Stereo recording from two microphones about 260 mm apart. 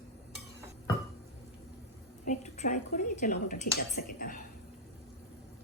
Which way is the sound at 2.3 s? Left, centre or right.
Left.